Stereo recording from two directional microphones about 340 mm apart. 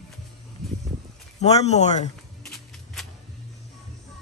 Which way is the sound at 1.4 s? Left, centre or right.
Centre.